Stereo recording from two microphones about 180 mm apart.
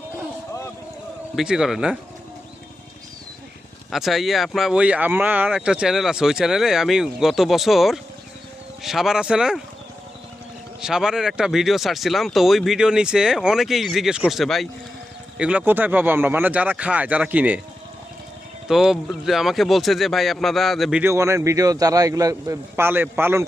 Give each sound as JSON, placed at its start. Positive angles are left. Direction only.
{"t": 1.4, "sound": "speech", "side_deg": -5}
{"t": 3.9, "sound": "speech", "side_deg": 0}
{"t": 10.8, "sound": "a man's voice", "side_deg": -5}
{"t": 18.7, "sound": "speech", "side_deg": 0}
{"t": 21.0, "sound": "a man's voice", "side_deg": -15}